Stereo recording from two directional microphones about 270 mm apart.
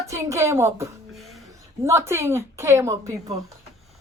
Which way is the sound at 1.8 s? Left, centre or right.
Centre.